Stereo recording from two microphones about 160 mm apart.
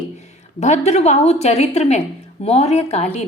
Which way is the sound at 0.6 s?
45° left (ahead or behind).